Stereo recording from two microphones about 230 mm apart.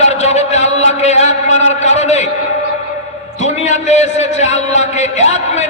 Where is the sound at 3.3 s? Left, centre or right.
Left.